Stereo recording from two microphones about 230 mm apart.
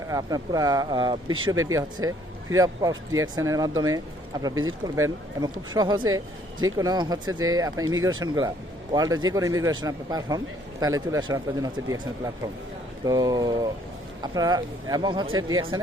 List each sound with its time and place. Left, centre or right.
0.1 s a man's voice: centre